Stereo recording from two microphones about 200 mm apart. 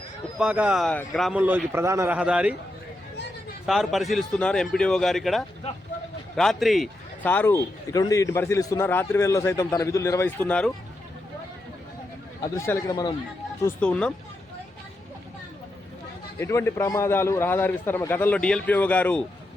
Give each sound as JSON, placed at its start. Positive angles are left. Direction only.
{"t": 0.3, "sound": "a man's voice", "side_deg": -5}
{"t": 3.7, "sound": "a man's voice", "side_deg": 0}
{"t": 12.4, "sound": "a man's voice", "side_deg": 15}
{"t": 13.7, "sound": "a man's voice", "side_deg": 5}
{"t": 16.4, "sound": "a man's voice", "side_deg": 15}